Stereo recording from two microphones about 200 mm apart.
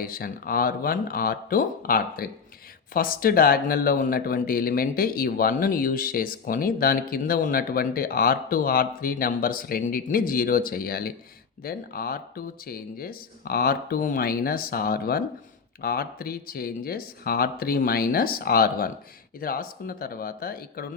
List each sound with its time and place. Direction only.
0.0 s speech: 45° left (ahead or behind)